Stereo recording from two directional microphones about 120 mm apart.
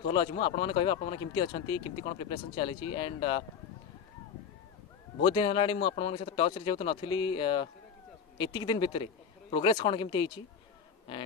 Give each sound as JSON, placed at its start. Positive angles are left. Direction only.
{"t": 0.0, "sound": "speech", "side_deg": 45}
{"t": 5.2, "sound": "speech", "side_deg": 45}